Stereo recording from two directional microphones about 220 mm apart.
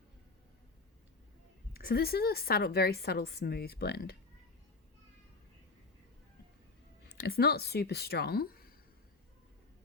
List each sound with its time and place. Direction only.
1.8 s a woman's voice: 45° left (ahead or behind)
7.2 s a woman's voice: 45° left (ahead or behind)